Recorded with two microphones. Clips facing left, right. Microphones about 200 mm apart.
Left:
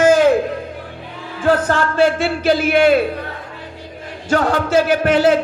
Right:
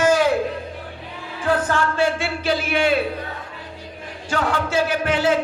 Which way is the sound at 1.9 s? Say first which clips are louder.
Left 6 dB; 40° left (ahead or behind).